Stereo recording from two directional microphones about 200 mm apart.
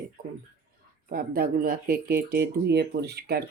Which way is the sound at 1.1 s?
45° right (ahead or behind).